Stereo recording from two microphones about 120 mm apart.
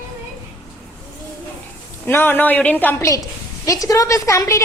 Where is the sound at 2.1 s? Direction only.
15° left (ahead or behind).